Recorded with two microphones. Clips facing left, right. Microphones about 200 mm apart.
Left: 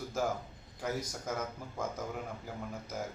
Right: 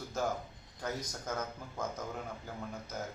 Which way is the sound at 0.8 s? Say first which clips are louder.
Left 2 dB; 10° left (ahead or behind).